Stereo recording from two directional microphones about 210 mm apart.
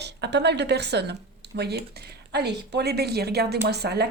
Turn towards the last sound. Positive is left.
turn(degrees=-50)  # may be behind; listen again after turning